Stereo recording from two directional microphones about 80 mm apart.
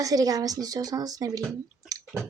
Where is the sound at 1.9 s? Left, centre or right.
Right.